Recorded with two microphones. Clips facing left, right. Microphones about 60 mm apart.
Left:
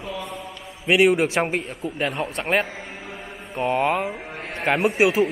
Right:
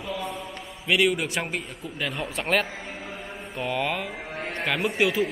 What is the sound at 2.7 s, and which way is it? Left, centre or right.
Mantra, centre.